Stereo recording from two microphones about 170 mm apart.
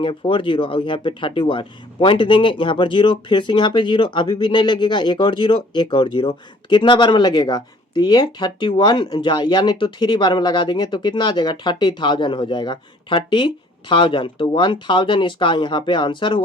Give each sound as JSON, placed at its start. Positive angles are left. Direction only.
{"t": 0.0, "sound": "speech", "side_deg": 30}